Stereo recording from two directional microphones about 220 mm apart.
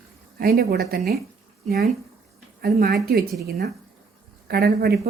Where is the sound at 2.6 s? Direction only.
45° right (ahead or behind).